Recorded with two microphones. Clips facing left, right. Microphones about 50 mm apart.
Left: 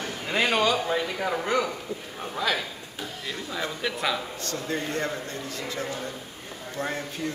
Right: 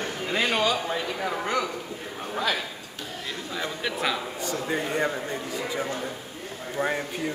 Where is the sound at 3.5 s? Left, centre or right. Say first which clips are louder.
Even; centre.